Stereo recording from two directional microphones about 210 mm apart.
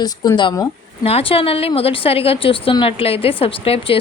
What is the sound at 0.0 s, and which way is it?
A woman's voice, 20° left (ahead or behind).